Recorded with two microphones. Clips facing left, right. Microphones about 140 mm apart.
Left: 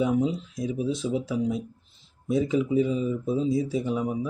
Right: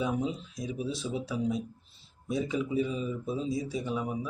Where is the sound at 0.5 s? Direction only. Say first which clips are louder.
Left 6 dB; 25° left (ahead or behind).